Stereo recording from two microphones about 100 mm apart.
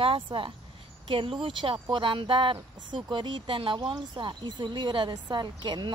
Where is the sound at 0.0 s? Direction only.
60° right (ahead or behind).